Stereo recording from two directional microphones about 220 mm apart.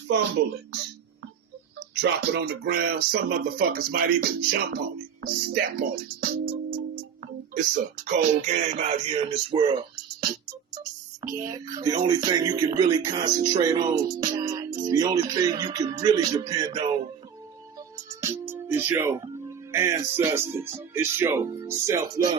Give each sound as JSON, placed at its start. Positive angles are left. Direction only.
{"t": 0.1, "sound": "speech", "side_deg": -55}
{"t": 2.0, "sound": "speech", "side_deg": -50}
{"t": 8.0, "sound": "speech", "side_deg": -35}
{"t": 11.4, "sound": "music", "side_deg": -15}
{"t": 17.9, "sound": "music", "side_deg": -10}